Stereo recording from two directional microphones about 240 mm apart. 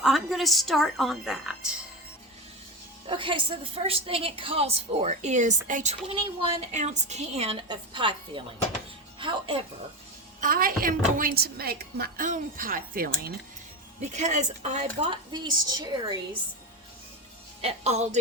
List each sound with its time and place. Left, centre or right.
0.0 s a woman's voice: centre
3.1 s a woman's voice: right
10.4 s a woman's voice: right; by 16.1 s centre
17.6 s a woman's voice: right